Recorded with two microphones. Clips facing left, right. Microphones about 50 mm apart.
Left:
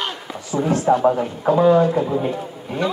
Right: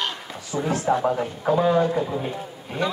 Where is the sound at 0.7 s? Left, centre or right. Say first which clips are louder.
Left 6 dB; left.